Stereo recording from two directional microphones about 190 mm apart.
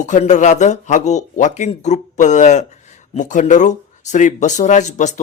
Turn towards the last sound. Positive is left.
turn(degrees=40)  # may be behind; listen again after turning